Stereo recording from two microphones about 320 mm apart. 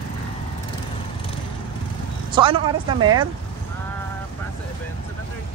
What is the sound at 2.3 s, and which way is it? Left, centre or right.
Speech, centre.